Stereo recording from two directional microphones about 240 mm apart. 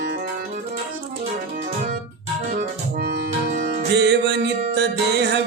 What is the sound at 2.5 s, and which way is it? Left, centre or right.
Music, right.